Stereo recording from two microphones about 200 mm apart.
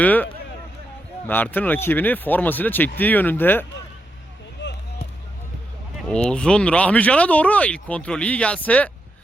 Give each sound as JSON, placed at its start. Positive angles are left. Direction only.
{"t": 0.0, "sound": "speech", "side_deg": 10}
{"t": 1.3, "sound": "speech", "side_deg": 10}
{"t": 4.6, "sound": "music", "side_deg": 65}
{"t": 6.1, "sound": "speech", "side_deg": 5}